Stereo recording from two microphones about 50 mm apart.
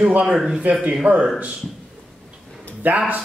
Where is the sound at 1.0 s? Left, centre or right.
Right.